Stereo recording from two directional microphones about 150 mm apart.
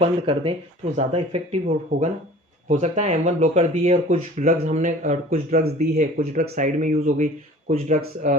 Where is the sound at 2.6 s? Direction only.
50° right (ahead or behind).